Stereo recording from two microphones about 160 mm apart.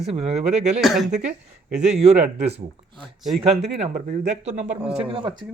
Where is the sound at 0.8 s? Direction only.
Centre (ahead or behind).